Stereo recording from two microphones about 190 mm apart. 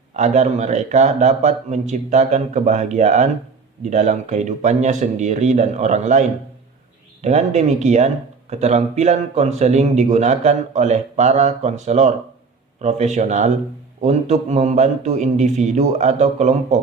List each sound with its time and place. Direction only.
0.1 s speech: 40° right (ahead or behind)